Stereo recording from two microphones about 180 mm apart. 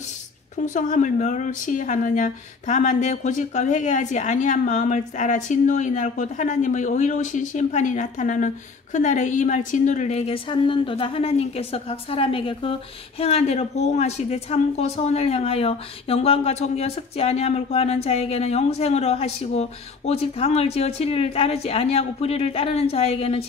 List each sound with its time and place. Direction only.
0.7 s speech: 45° left (ahead or behind)